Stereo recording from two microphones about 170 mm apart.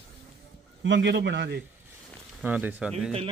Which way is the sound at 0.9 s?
85° right.